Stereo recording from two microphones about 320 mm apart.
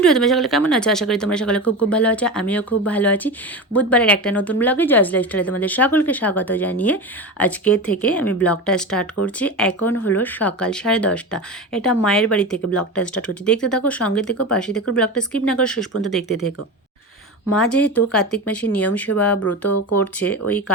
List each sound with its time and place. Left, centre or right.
0.0 s speech: centre
17.6 s speech: centre
19.4 s speech: left
20.0 s speech: centre